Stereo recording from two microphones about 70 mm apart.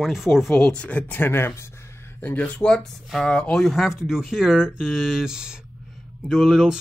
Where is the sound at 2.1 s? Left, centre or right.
Left.